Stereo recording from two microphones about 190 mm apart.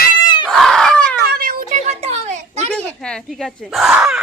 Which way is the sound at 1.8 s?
35° right (ahead or behind).